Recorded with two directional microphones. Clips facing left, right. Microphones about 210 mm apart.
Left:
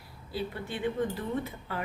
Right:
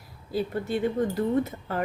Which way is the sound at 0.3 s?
45° right (ahead or behind).